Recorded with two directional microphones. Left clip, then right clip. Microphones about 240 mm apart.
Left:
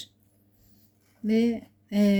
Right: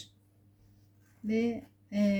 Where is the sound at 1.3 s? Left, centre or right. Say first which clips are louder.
Left 6 dB; left.